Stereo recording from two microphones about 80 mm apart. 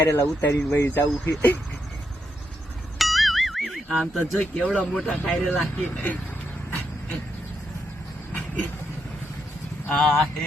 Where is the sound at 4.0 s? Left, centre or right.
Centre.